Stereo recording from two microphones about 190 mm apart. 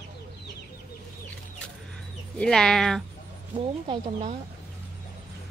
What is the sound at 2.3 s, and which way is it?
Speech, 5° left (ahead or behind).